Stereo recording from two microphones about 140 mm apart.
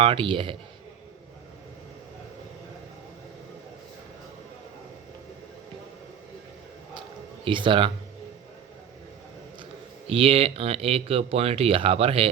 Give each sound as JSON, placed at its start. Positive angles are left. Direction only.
{"t": 0.0, "sound": "a man's voice", "side_deg": -40}
{"t": 7.4, "sound": "a man's voice", "side_deg": -35}
{"t": 10.1, "sound": "speech", "side_deg": -45}